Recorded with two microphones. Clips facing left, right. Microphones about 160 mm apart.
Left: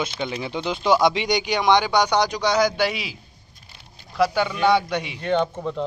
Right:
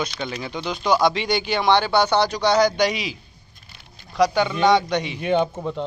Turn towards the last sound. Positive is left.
turn(degrees=-5)  # may be behind; listen again after turning